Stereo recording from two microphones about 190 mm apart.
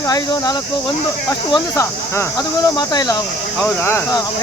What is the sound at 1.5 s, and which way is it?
Speech, 15° left (ahead or behind).